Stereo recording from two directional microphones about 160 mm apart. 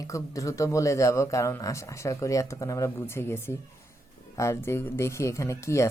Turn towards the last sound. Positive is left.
turn(degrees=20)  # may be behind; listen again after turning